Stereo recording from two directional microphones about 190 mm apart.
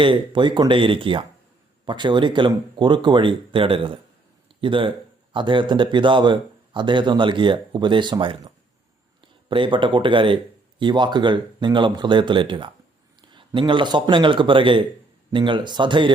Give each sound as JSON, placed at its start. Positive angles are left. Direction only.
{"t": 0.0, "sound": "speech", "side_deg": -25}